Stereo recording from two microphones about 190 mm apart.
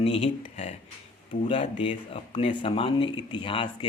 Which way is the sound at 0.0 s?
30° left (ahead or behind).